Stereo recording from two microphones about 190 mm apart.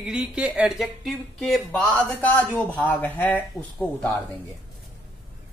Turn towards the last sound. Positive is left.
turn(degrees=10)  # may be behind; listen again after turning